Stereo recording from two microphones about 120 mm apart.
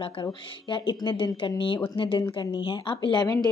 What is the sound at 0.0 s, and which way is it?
Speech, 45° left (ahead or behind).